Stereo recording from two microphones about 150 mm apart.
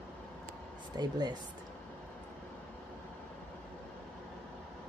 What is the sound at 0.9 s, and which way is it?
Speech, 25° right (ahead or behind).